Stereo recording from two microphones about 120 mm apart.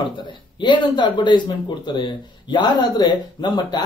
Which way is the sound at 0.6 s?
40° left (ahead or behind).